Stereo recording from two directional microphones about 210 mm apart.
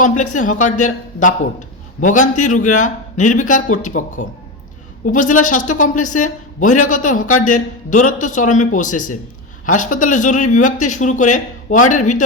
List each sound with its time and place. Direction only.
0.2 s a man's voice: 35° left (ahead or behind)